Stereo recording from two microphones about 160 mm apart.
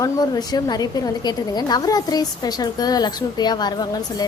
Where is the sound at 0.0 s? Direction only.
25° left (ahead or behind).